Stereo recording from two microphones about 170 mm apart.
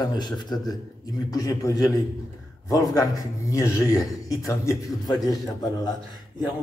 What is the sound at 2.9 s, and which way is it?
A man's voice, 20° left (ahead or behind).